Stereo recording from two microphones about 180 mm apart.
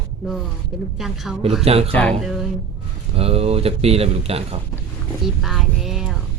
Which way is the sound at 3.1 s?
35° right (ahead or behind).